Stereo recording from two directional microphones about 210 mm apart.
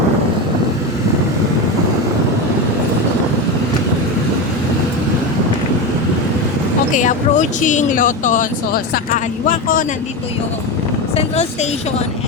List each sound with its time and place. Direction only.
6.9 s speech: 35° left (ahead or behind)